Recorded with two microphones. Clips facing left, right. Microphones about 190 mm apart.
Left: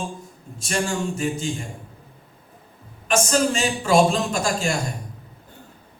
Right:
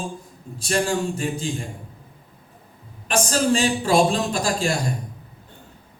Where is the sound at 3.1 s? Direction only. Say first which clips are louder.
Even; 35° right (ahead or behind).